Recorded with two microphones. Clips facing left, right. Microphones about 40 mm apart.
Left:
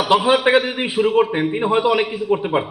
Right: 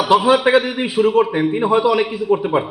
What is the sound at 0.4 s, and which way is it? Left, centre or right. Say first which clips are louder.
A man's voice: right 1 dB; centre.